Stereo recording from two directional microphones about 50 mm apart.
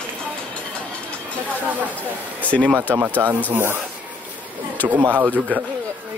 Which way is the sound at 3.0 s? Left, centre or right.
Right.